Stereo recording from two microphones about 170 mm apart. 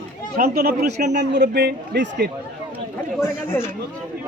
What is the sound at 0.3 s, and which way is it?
Speech, 60° right (ahead or behind).